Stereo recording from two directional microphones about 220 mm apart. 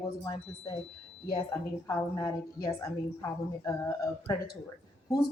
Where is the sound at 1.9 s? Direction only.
15° left (ahead or behind).